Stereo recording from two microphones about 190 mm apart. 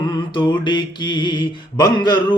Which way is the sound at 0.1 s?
25° left (ahead or behind).